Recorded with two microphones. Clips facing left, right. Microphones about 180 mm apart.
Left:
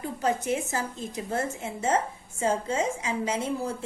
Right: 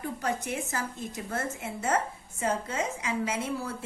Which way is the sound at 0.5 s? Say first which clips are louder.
Left 4 dB; 20° left (ahead or behind).